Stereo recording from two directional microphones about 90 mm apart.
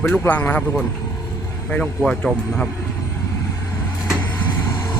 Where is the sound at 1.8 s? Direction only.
5° left (ahead or behind).